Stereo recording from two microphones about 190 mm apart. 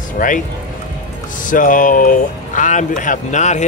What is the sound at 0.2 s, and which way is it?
Speech, 45° left (ahead or behind).